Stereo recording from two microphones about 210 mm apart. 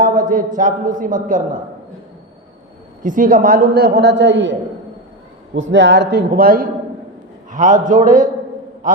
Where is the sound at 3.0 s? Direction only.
40° right (ahead or behind); by 4.5 s 60° right (ahead or behind).